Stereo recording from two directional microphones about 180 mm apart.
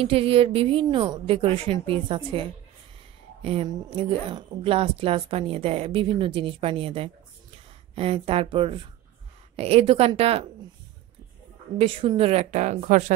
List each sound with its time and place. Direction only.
0.0 s a woman's voice: 30° right (ahead or behind)
3.4 s a woman's voice: 30° right (ahead or behind)
11.8 s a woman's voice: 30° right (ahead or behind)